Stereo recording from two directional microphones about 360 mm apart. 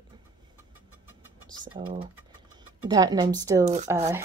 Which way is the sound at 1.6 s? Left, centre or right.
Centre.